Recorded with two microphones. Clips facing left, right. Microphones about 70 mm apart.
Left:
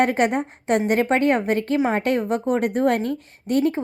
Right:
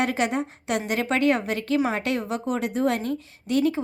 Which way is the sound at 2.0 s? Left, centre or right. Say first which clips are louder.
Left 5 dB; left.